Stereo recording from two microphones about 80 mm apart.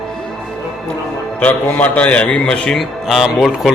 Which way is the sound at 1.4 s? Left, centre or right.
Centre.